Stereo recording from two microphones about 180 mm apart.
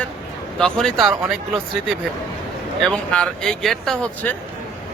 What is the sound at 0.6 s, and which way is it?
Speech, 5° left (ahead or behind).